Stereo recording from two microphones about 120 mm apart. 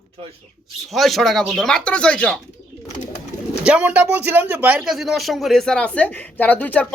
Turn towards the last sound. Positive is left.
turn(degrees=15)  # may be behind; listen again after turning